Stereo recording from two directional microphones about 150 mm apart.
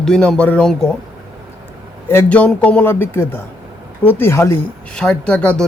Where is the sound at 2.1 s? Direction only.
10° left (ahead or behind).